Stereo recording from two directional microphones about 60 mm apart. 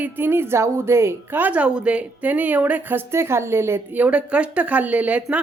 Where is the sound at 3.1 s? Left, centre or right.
Right.